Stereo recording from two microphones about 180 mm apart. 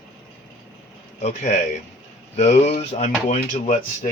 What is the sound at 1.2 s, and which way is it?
Speech, 40° left (ahead or behind).